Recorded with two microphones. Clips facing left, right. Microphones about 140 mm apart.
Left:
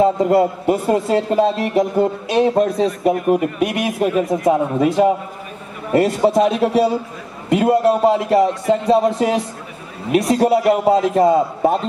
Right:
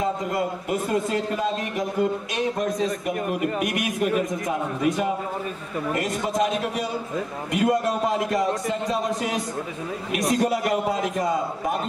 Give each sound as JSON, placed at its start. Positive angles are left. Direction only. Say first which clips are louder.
{"t": 0.0, "sound": "a man's voice", "louder": "left 11 dB", "side_deg": 30}